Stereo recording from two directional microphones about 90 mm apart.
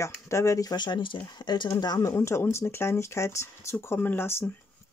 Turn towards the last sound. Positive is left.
turn(degrees=25)  # may be behind; listen again after turning